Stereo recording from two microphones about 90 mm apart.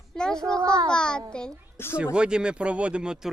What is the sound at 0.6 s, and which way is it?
Speech, 35° right (ahead or behind).